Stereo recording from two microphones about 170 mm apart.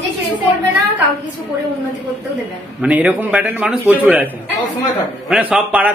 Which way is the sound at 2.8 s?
10° right (ahead or behind).